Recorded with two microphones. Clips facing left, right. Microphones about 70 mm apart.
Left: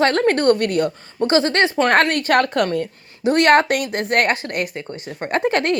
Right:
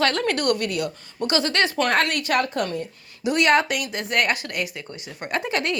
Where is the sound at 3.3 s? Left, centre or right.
Left.